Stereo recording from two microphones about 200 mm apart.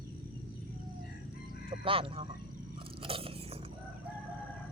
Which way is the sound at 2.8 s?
25° right (ahead or behind).